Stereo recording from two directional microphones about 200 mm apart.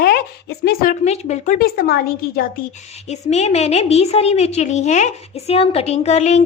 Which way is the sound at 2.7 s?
35° left (ahead or behind).